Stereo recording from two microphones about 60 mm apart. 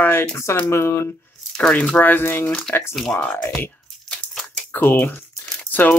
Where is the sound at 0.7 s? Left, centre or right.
Left.